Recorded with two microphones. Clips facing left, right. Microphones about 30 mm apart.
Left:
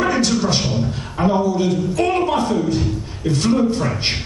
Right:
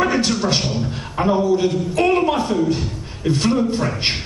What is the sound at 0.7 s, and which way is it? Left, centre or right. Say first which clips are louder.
Beatboxing: left 2 dB; centre.